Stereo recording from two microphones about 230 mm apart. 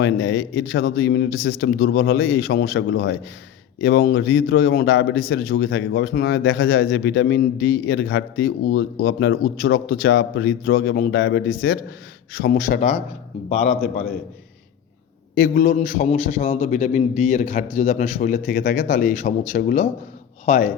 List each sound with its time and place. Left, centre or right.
0.0 s a man's voice: left
15.4 s a man's voice: left